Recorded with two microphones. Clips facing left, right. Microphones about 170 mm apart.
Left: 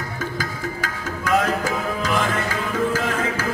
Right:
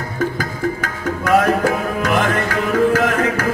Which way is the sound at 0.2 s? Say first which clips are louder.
Right 9 dB; 55° right (ahead or behind).